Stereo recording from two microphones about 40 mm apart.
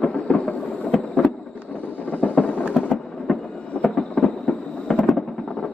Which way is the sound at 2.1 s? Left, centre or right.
Left.